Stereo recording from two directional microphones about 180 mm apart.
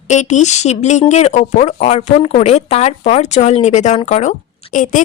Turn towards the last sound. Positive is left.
turn(degrees=45)  # may be behind; listen again after turning